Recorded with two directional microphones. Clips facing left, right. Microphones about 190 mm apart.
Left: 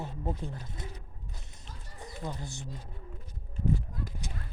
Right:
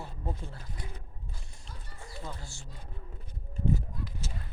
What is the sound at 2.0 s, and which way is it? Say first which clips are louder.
Speech: left 4 dB; 20° left (ahead or behind).